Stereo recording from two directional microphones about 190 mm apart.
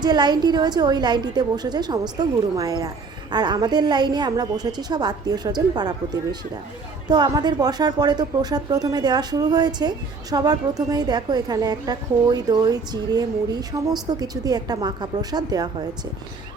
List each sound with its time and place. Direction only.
0.0 s speech: 20° right (ahead or behind)
7.1 s speech: 20° right (ahead or behind)